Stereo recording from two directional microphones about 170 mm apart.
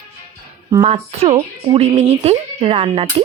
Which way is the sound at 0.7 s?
25° right (ahead or behind).